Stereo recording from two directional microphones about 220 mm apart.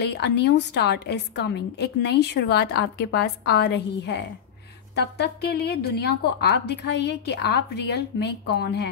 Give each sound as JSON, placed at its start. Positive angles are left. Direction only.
{"t": 0.0, "sound": "a woman's voice", "side_deg": 50}